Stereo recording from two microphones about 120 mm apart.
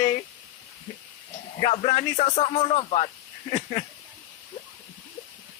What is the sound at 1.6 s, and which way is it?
A man's voice, 60° left (ahead or behind).